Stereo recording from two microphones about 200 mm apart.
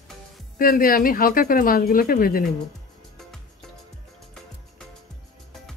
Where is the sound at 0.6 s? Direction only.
45° left (ahead or behind).